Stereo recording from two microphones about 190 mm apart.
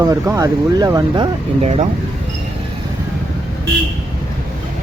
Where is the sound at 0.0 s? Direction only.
20° right (ahead or behind).